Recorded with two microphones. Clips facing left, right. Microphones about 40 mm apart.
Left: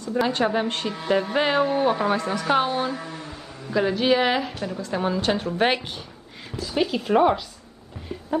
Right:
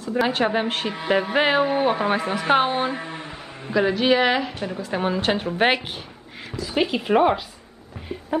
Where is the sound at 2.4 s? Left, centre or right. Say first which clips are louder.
Right 3 dB; right.